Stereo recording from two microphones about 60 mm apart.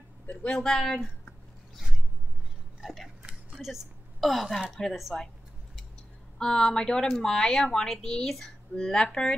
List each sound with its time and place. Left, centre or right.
0.6 s speech: centre
2.8 s speech: centre
3.3 s a sound: centre
3.6 s a woman's voice: centre
6.3 s speech: centre